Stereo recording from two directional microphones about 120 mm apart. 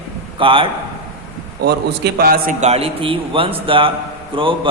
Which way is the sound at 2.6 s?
60° right (ahead or behind).